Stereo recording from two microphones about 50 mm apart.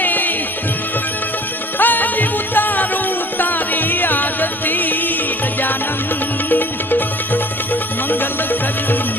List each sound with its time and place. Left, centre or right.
0.0 s music: left
1.8 s music: left
6.5 s music: left